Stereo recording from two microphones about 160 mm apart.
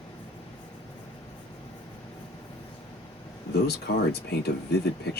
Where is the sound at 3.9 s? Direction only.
75° left (ahead or behind).